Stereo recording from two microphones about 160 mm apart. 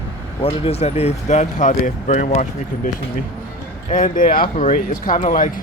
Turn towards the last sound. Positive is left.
turn(degrees=55)  # may be behind; listen again after turning